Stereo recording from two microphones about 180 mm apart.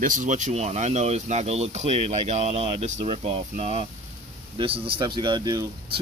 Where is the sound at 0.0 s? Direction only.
45° right (ahead or behind).